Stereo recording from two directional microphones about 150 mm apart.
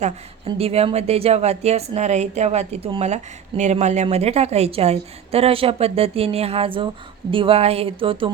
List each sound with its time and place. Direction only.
0.4 s a woman's voice: 40° right (ahead or behind)